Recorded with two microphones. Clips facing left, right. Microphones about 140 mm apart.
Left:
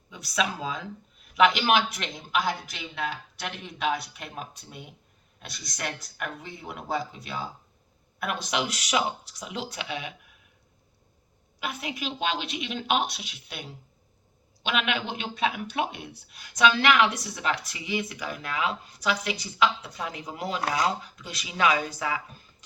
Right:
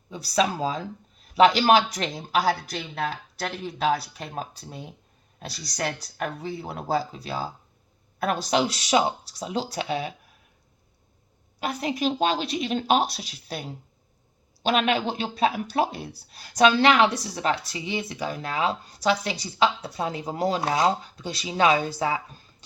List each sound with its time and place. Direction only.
0.1 s speech: 35° right (ahead or behind)
11.6 s speech: 35° right (ahead or behind)